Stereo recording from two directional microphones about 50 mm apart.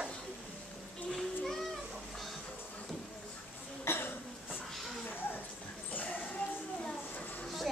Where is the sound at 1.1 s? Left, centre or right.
Centre.